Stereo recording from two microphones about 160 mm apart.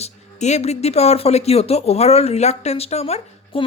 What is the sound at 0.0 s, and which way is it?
Speech, 45° left (ahead or behind).